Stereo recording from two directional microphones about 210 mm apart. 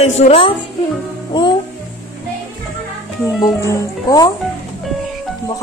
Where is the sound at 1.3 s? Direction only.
20° left (ahead or behind).